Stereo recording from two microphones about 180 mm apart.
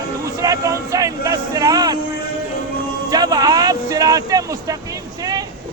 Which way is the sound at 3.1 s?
20° right (ahead or behind).